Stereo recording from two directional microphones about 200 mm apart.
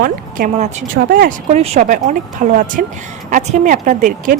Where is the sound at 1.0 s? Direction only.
50° right (ahead or behind).